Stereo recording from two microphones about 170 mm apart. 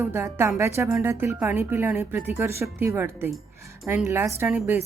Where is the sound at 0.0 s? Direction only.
15° right (ahead or behind).